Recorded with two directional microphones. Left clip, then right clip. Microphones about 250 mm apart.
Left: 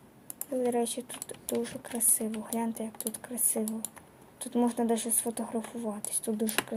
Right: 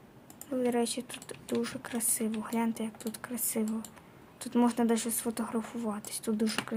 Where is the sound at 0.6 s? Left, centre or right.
Centre.